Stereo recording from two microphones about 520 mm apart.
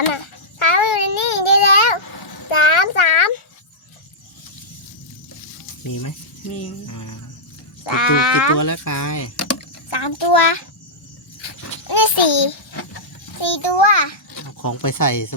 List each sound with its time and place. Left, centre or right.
0.7 s child singing: left
2.5 s a sound: left
5.8 s speech: left
7.9 s speech: left
8.5 s speech: left
9.9 s a child's voice: left
11.9 s a sound: left
13.4 s a child's voice: left
14.6 s speech: left